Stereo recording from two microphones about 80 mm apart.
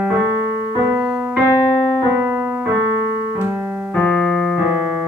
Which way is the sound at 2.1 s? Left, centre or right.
Right.